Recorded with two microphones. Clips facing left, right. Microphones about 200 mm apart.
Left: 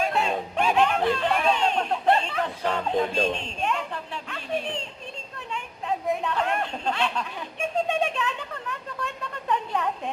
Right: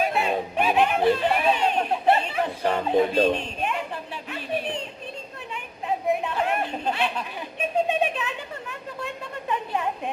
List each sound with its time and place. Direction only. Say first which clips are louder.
0.0 s a sound: right 1 dB; 5° right (ahead or behind)
3.2 s speech: right 5 dB; 60° right (ahead or behind)
3.6 s a sound: even; 5° right (ahead or behind)
6.2 s chatter: right 1 dB; 10° right (ahead or behind)
7.9 s speech: right 1 dB; 5° right (ahead or behind)
9.5 s a woman's voice: left 1 dB; 10° right (ahead or behind)